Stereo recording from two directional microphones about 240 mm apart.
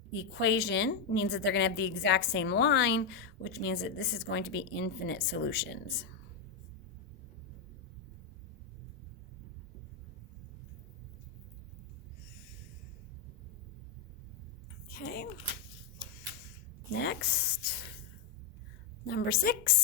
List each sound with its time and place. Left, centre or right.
0.1 s a woman's voice: left
14.8 s a sound: left
17.0 s speech: left
19.0 s a woman's voice: left